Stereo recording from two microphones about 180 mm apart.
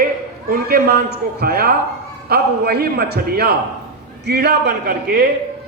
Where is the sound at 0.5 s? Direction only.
60° right (ahead or behind).